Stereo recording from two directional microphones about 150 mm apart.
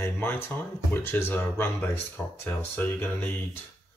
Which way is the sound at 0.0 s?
15° left (ahead or behind).